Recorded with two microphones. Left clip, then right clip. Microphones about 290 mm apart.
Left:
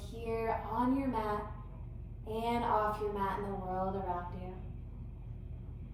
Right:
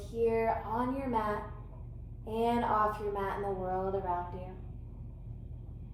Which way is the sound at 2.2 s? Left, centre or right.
Centre.